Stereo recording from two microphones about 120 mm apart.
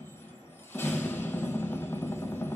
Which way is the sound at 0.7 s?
15° left (ahead or behind).